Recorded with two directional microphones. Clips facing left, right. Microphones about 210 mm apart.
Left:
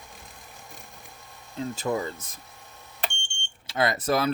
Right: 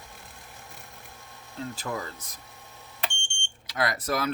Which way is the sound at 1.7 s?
25° left (ahead or behind).